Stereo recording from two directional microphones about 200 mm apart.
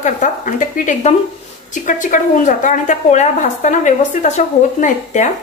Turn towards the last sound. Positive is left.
turn(degrees=40)  # may be behind; listen again after turning